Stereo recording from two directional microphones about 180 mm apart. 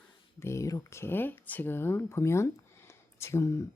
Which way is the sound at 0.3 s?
15° left (ahead or behind).